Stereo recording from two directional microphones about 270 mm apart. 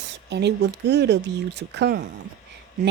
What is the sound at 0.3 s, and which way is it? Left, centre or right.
Speech, right.